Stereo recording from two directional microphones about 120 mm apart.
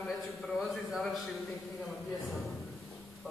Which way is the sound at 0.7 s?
Centre (ahead or behind).